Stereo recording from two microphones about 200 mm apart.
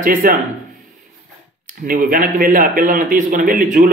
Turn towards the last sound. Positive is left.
turn(degrees=-40)  # may be behind; listen again after turning